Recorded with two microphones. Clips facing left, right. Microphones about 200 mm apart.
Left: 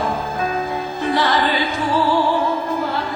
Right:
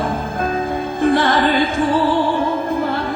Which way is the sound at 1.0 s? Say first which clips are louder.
Right 4 dB; 50° right (ahead or behind).